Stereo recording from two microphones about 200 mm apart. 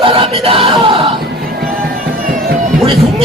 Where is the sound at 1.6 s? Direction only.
45° right (ahead or behind).